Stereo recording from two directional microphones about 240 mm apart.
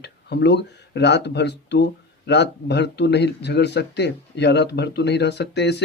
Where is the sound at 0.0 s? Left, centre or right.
Left.